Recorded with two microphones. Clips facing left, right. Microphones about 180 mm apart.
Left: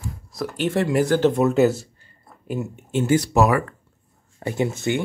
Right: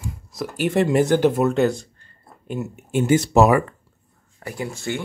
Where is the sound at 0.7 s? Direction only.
20° right (ahead or behind).